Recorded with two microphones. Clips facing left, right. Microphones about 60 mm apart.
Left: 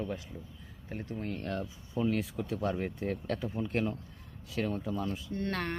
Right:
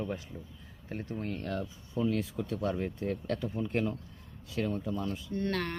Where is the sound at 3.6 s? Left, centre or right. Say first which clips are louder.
Even; centre.